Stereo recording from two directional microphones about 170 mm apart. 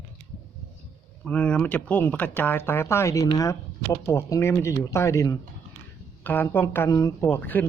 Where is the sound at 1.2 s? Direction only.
5° left (ahead or behind).